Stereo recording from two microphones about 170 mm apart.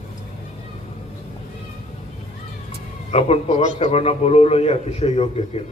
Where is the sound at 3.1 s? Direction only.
35° left (ahead or behind).